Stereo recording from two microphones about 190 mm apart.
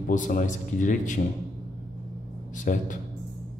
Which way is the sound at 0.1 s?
40° left (ahead or behind).